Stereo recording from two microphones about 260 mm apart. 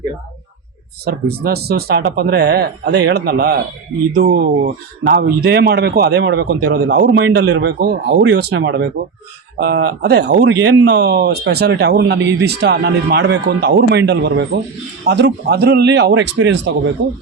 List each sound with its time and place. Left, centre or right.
1.0 s speech: right